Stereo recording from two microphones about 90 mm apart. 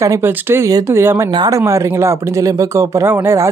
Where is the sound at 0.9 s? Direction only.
30° right (ahead or behind).